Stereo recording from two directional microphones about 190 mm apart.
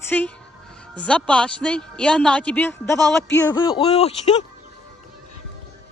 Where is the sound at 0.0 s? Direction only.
10° left (ahead or behind).